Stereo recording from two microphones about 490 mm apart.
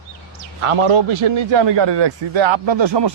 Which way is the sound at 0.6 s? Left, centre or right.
Right.